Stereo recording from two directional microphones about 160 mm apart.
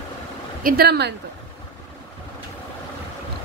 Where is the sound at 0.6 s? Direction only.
80° right.